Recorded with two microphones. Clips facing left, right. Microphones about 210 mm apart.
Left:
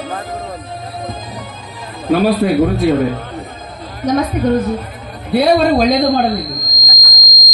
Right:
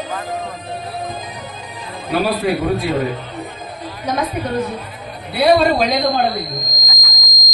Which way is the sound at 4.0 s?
50° left (ahead or behind).